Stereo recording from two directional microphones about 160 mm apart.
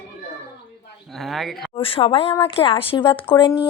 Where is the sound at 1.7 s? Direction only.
35° left (ahead or behind).